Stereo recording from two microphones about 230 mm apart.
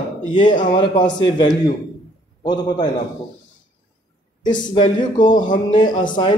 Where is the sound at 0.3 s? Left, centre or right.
Left.